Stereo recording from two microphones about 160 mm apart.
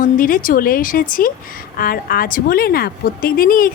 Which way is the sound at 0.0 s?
60° left (ahead or behind).